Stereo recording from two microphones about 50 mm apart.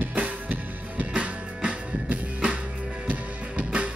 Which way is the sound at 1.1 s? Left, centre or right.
Right.